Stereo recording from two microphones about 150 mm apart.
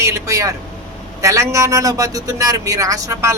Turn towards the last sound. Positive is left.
turn(degrees=-20)  # may be behind; listen again after turning